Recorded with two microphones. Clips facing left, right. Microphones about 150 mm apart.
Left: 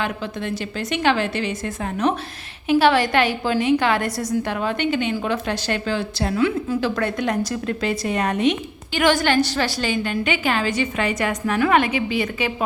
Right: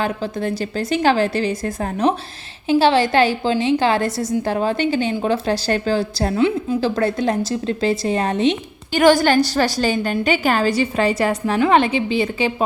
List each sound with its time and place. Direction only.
0.0 s a woman's voice: 35° right (ahead or behind)
6.4 s a woman's voice: 25° right (ahead or behind)